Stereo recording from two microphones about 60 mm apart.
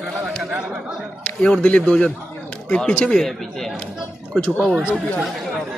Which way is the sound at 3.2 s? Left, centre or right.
Centre.